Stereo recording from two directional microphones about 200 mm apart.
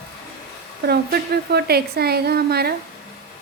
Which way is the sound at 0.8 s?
50° right (ahead or behind).